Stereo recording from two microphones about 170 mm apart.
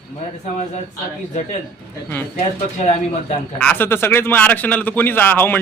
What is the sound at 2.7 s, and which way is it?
Speech, 40° left (ahead or behind).